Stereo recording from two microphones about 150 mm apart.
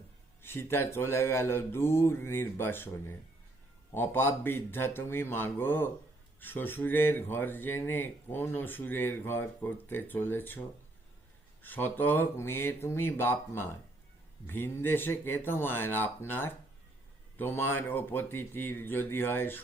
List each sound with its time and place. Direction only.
0.4 s speech: 15° left (ahead or behind)
11.6 s speech: 10° left (ahead or behind)